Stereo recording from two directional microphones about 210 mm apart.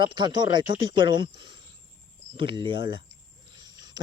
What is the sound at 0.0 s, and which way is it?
Speech, 20° right (ahead or behind).